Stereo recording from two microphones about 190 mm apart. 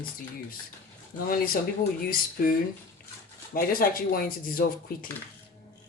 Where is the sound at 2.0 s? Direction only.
50° left (ahead or behind).